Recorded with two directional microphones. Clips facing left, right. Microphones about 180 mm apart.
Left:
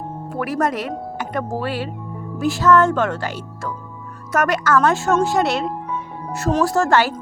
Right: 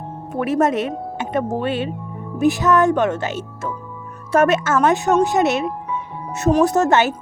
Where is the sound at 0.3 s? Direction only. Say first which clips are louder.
Right 4 dB; 25° right (ahead or behind).